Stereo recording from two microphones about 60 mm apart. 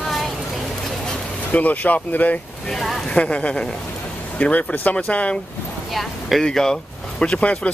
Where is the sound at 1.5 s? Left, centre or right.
Left.